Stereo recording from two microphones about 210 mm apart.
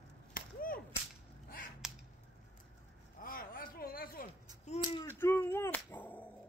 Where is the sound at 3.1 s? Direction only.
40° left (ahead or behind).